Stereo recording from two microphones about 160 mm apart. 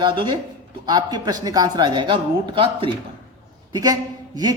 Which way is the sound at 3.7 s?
20° right (ahead or behind).